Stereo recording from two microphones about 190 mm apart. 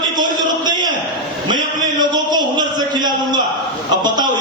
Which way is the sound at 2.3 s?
20° right (ahead or behind).